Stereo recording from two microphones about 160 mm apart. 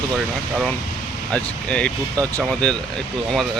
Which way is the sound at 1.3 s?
5° left (ahead or behind).